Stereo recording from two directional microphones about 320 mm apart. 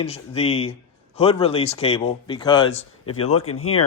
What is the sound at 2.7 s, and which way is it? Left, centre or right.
Speech, left.